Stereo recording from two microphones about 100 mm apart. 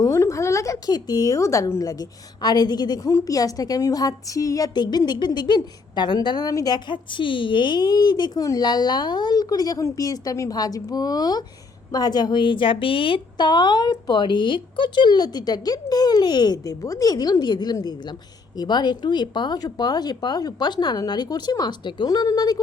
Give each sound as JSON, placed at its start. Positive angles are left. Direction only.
{"t": 0.0, "sound": "a woman's voice", "side_deg": 30}